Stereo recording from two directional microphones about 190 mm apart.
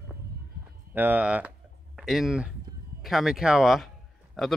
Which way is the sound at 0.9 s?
10° right (ahead or behind).